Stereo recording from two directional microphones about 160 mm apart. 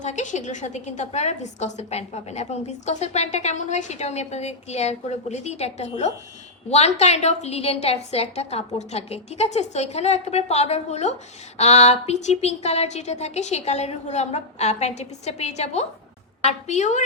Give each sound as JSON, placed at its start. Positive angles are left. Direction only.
{"t": 0.0, "sound": "a woman's voice", "side_deg": 50}